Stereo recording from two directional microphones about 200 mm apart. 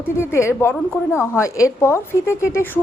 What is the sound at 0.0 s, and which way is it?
A woman's voice, 10° left (ahead or behind).